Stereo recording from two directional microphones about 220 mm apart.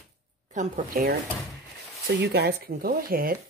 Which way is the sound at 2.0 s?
45° right (ahead or behind).